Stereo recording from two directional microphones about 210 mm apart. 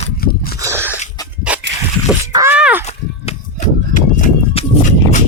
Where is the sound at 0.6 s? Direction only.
15° right (ahead or behind).